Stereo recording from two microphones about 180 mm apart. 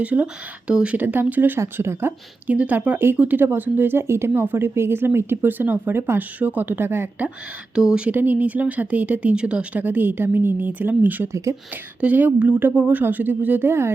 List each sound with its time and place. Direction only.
0.0 s speech: 10° right (ahead or behind)